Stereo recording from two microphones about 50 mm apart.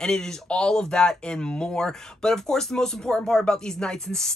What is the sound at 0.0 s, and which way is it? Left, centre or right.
Speech, centre.